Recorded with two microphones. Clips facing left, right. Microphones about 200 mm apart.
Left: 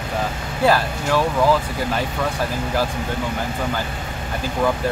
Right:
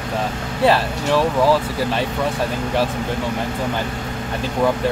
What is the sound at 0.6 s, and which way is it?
Speech, 30° right (ahead or behind).